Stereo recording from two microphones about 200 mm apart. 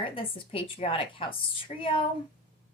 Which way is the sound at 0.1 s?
25° left (ahead or behind).